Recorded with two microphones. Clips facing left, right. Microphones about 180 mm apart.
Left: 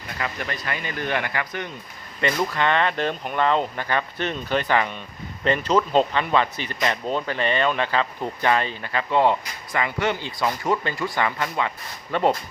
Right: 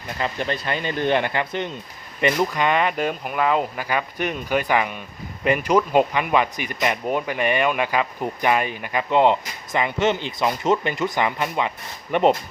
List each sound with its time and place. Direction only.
0.2 s speech: 30° right (ahead or behind)